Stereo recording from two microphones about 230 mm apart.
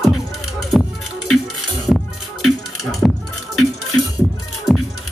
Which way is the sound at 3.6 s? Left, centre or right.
Left.